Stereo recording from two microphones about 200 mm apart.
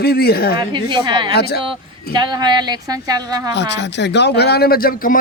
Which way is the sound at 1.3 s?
50° left (ahead or behind).